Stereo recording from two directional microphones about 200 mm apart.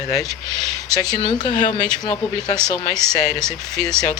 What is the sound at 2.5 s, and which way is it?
Speech, 5° left (ahead or behind).